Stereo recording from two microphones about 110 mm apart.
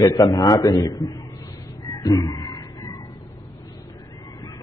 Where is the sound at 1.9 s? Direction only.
30° left (ahead or behind).